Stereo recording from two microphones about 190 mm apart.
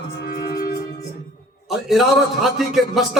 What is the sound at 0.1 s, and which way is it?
Music, 55° left (ahead or behind).